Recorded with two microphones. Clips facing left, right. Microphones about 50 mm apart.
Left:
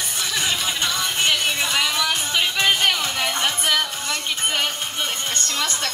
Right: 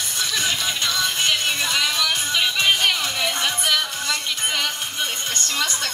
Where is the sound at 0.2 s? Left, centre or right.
Left.